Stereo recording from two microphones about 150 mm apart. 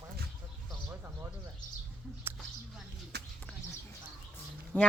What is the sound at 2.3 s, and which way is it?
Speech, 15° right (ahead or behind).